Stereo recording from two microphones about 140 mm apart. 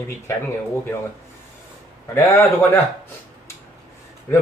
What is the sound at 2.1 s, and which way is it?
Speech, 20° left (ahead or behind).